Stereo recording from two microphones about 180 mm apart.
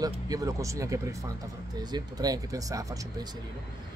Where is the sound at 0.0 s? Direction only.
20° right (ahead or behind).